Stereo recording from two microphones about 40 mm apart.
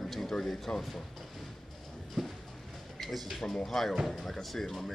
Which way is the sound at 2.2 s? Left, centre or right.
Centre.